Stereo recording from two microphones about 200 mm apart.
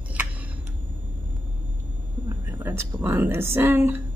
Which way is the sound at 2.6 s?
10° right (ahead or behind).